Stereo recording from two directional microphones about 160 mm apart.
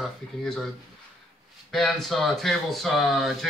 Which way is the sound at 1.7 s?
Centre (ahead or behind).